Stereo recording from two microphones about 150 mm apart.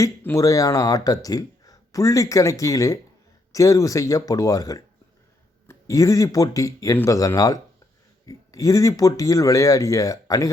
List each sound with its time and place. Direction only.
0.0 s speech: 15° left (ahead or behind)